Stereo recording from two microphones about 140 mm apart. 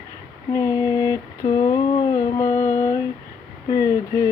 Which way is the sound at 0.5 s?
25° left (ahead or behind).